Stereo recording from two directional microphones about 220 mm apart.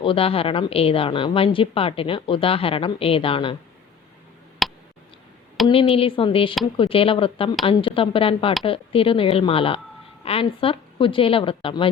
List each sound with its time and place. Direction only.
0.0 s a woman's voice: 25° left (ahead or behind)
4.6 s a sound: centre (ahead or behind)
5.9 s a woman's voice: 25° left (ahead or behind)